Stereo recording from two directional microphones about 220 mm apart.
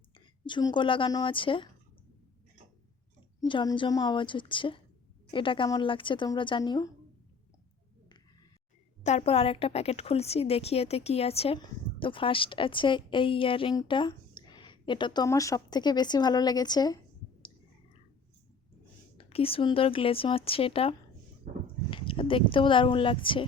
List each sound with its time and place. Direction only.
0.4 s a woman's voice: 20° left (ahead or behind)
3.4 s a woman's voice: 20° left (ahead or behind)
9.0 s a woman's voice: 30° left (ahead or behind)
19.1 s a woman's voice: 25° left (ahead or behind)
21.5 s a sound: 30° right (ahead or behind)
21.8 s speech: 25° left (ahead or behind)